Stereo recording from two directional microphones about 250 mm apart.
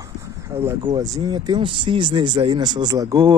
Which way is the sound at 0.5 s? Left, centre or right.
Centre.